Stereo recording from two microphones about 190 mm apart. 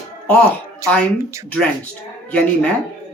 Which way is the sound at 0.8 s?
15° right (ahead or behind).